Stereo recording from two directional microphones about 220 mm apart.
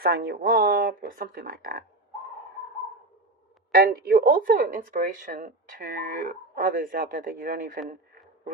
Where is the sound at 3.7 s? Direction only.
40° right (ahead or behind).